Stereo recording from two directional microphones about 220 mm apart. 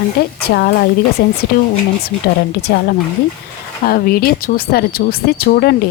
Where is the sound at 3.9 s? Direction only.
45° left (ahead or behind).